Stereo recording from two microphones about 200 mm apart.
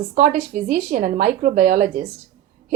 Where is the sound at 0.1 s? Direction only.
40° right (ahead or behind).